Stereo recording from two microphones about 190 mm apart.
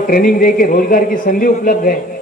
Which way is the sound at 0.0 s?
50° left (ahead or behind).